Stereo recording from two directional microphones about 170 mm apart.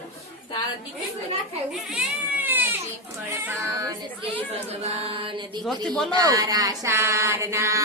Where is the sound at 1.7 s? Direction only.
Centre (ahead or behind).